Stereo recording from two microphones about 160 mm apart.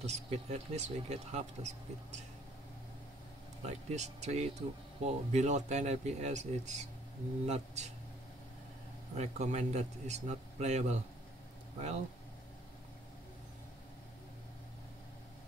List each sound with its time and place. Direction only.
0.0 s speech: 45° right (ahead or behind)
3.6 s speech: 45° right (ahead or behind)
9.1 s speech: 45° right (ahead or behind)